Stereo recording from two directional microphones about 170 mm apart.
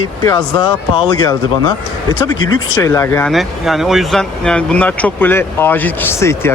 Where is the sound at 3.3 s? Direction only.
Centre (ahead or behind); by 6.5 s 15° left (ahead or behind).